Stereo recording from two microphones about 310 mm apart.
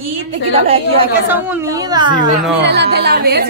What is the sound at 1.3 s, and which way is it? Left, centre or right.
Speech, centre.